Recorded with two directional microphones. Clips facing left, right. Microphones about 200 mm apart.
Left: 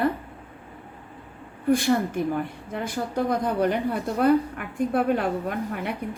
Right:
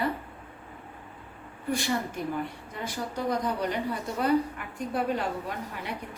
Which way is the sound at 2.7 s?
55° left (ahead or behind).